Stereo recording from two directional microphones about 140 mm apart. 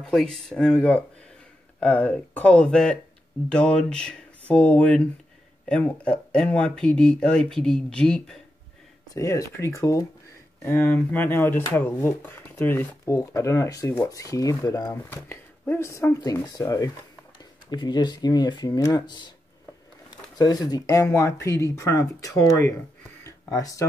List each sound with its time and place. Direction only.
0.0 s speech: 5° left (ahead or behind)
9.1 s speech: 25° left (ahead or behind)
15.0 s speech: 15° left (ahead or behind)
23.2 s a sound: 25° left (ahead or behind)